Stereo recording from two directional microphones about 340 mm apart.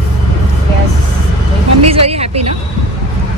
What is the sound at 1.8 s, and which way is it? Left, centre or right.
Speech, right.